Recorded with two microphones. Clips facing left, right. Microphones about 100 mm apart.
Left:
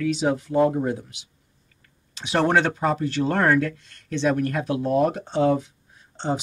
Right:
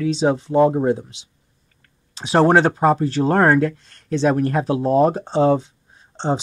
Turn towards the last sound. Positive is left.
turn(degrees=-30)  # may be behind; listen again after turning